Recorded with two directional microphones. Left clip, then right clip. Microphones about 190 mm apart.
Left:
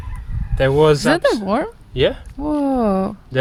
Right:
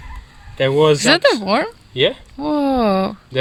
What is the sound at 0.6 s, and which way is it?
Speech, 20° left (ahead or behind).